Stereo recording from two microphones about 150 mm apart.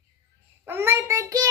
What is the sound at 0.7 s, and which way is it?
Speech, 15° right (ahead or behind).